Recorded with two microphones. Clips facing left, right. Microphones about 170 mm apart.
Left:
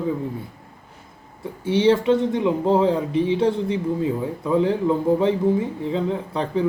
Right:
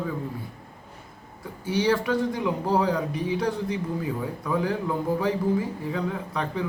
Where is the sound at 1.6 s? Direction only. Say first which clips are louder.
Left 6 dB; 25° left (ahead or behind).